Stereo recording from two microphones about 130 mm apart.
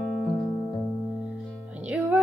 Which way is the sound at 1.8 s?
10° right (ahead or behind).